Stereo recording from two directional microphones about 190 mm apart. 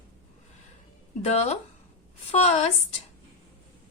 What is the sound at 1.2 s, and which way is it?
A woman's voice, 35° left (ahead or behind).